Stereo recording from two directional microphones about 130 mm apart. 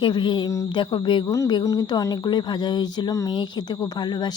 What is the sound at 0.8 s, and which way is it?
A woman's voice, 40° left (ahead or behind).